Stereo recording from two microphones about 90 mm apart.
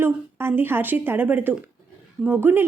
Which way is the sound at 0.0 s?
25° right (ahead or behind).